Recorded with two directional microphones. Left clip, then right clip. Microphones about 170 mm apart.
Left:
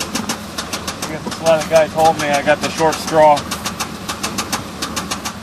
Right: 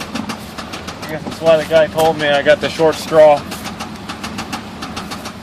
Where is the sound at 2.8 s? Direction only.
35° right (ahead or behind).